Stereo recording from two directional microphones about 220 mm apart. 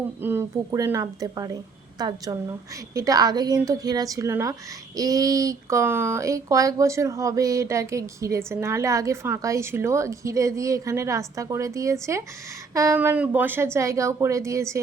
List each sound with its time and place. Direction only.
0.2 s speech: 10° right (ahead or behind)